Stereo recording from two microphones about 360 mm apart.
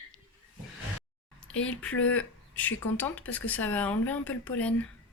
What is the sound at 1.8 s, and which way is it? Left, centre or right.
Speech, left.